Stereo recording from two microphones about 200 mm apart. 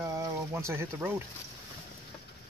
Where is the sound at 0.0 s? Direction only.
15° right (ahead or behind).